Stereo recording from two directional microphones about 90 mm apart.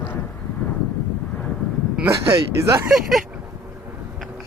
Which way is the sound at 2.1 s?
35° right (ahead or behind).